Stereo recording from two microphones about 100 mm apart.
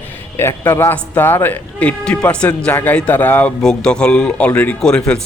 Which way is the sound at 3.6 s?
5° left (ahead or behind).